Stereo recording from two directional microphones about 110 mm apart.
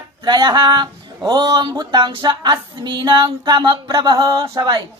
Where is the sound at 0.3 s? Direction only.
40° right (ahead or behind).